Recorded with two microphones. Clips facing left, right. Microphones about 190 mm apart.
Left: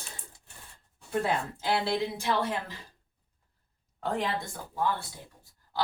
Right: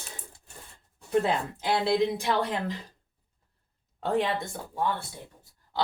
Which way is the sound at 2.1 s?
15° right (ahead or behind).